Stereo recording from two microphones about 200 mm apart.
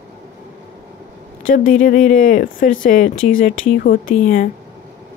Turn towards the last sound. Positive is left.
turn(degrees=45)  # may be behind; listen again after turning